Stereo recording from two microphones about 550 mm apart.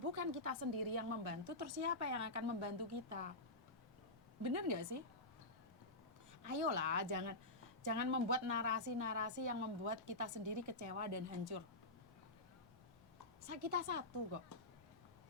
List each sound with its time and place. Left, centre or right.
0.1 s a woman's voice: right
4.4 s a woman's voice: right
6.4 s a woman's voice: right
13.4 s a woman's voice: right